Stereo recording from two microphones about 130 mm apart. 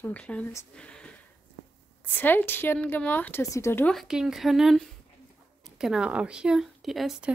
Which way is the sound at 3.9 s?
Centre (ahead or behind).